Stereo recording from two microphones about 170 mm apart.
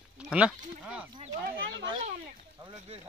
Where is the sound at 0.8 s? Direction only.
5° right (ahead or behind).